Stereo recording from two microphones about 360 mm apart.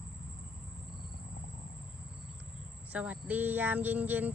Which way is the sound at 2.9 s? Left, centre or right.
Centre.